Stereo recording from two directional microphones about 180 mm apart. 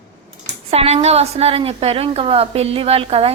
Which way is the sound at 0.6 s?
35° right (ahead or behind).